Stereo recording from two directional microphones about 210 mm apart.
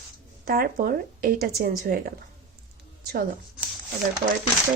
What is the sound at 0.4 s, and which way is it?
Speech, 45° right (ahead or behind).